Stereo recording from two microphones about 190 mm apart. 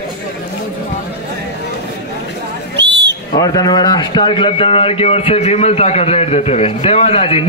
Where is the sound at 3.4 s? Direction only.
20° left (ahead or behind).